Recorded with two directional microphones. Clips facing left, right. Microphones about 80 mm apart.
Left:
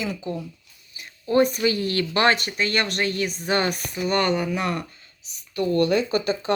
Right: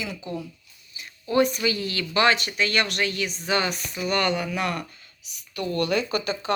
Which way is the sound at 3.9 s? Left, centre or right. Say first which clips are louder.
Left 2 dB; left.